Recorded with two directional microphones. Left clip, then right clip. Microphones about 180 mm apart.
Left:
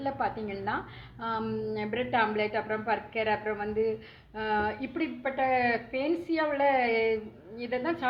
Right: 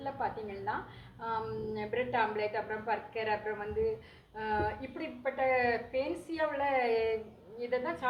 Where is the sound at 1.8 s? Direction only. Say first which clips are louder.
Left 3 dB; 30° left (ahead or behind).